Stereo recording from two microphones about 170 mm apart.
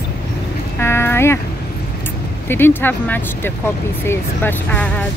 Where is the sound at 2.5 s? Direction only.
10° left (ahead or behind).